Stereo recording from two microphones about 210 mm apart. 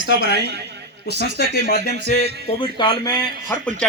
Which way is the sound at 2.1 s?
40° left (ahead or behind).